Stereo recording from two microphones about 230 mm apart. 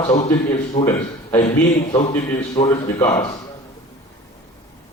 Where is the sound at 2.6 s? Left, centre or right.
Centre.